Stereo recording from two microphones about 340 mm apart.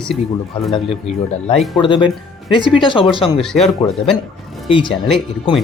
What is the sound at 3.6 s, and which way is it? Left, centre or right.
Speech, centre.